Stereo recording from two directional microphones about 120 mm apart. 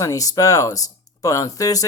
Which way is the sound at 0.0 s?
30° left (ahead or behind).